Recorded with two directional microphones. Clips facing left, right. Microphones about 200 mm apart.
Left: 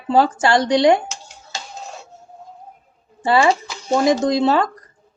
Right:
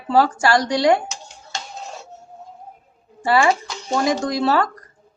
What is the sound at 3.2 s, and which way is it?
Speech, 25° left (ahead or behind).